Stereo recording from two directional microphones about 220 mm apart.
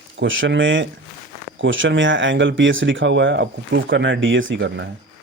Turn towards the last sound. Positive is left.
turn(degrees=-50)  # may be behind; listen again after turning